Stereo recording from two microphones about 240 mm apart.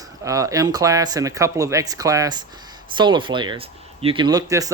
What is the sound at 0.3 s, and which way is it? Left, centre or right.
Speech, centre.